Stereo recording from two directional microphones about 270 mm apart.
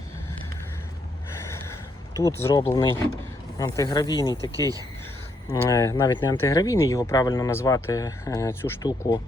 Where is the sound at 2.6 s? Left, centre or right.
Centre.